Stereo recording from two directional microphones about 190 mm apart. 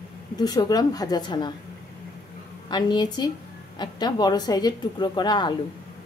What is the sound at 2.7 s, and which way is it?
Speech, 25° left (ahead or behind).